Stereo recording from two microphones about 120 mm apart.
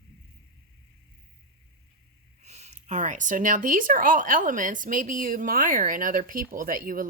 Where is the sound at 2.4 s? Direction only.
70° right (ahead or behind).